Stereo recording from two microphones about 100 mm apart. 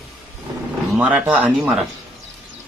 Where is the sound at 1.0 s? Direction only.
10° right (ahead or behind).